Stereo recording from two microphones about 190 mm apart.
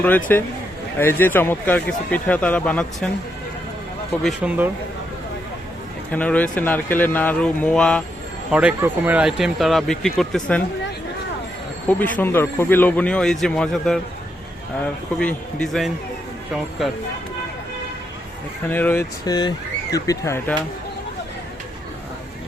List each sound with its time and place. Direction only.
0.3 s speech: 10° left (ahead or behind)
4.2 s speech: 5° right (ahead or behind)
6.1 s speech: 5° left (ahead or behind)
8.4 s speech: 5° right (ahead or behind)
11.9 s speech: 10° left (ahead or behind)
18.7 s speech: 10° left (ahead or behind)
19.2 s speech: 20° left (ahead or behind)